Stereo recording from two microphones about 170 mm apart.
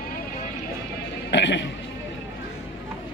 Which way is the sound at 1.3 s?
90° left.